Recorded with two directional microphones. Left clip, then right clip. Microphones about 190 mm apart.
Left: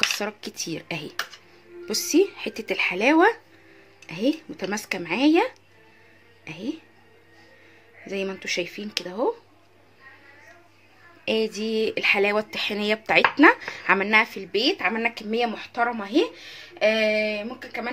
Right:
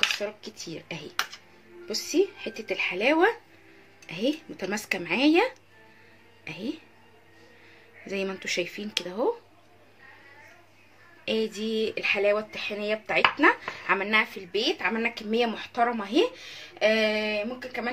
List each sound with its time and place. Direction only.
0.2 s speech: 40° left (ahead or behind); by 6.8 s 10° left (ahead or behind)
8.1 s speech: 10° left (ahead or behind)
11.2 s speech: 25° left (ahead or behind)